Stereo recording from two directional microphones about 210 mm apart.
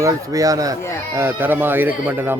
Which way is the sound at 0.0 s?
15° right (ahead or behind).